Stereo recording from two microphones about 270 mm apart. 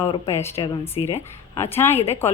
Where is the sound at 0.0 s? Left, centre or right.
Centre.